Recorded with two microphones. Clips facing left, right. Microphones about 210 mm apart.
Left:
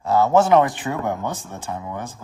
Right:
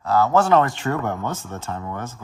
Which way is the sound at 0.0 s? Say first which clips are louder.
Left 2 dB; 20° left (ahead or behind).